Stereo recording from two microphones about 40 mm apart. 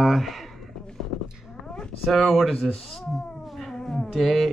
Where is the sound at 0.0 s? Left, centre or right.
Centre.